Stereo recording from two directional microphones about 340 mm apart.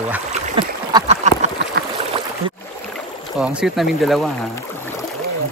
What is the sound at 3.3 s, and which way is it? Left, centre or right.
Speech, centre.